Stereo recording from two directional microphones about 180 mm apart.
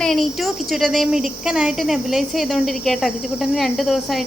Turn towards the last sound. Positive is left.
turn(degrees=0)  # may be behind; listen again after turning